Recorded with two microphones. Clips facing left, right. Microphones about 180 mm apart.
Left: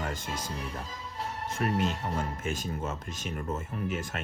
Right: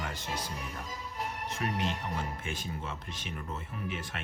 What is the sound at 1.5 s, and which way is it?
Speech, 45° left (ahead or behind).